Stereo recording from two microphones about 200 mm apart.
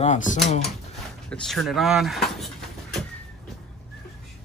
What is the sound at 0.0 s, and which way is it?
Speech, 35° left (ahead or behind).